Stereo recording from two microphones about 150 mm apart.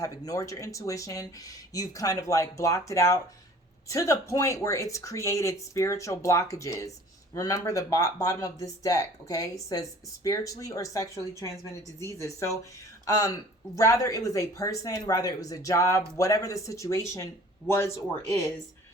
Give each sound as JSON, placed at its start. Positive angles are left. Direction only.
{"t": 0.0, "sound": "speech", "side_deg": 20}